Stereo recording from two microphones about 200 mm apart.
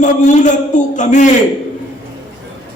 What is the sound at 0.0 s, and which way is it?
A man's voice, 40° left (ahead or behind).